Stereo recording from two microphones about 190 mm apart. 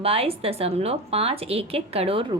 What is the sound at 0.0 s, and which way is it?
A woman's voice, 30° right (ahead or behind).